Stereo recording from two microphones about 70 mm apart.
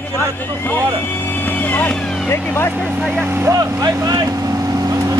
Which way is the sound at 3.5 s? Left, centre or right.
Right.